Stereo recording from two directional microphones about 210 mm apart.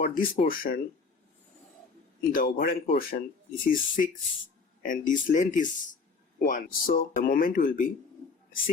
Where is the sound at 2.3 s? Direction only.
45° left (ahead or behind).